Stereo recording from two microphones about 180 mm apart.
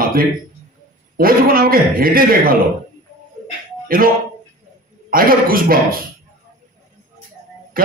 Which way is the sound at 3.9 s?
55° right (ahead or behind).